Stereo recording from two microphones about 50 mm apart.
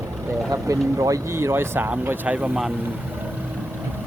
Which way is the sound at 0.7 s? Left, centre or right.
Right.